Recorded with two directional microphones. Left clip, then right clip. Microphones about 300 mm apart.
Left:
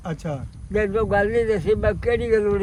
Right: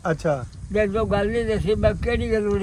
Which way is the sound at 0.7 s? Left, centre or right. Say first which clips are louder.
Left 1 dB; centre.